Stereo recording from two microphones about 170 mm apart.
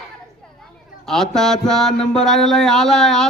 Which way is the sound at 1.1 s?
5° left (ahead or behind).